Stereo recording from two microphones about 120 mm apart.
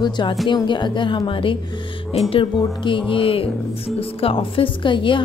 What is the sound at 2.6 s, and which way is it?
A woman's voice, 45° left (ahead or behind).